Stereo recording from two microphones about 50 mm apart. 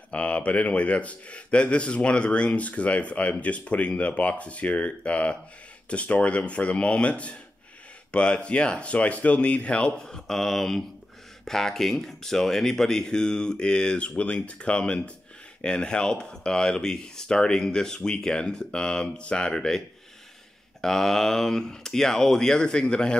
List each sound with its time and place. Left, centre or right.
0.1 s speech: left
20.8 s speech: centre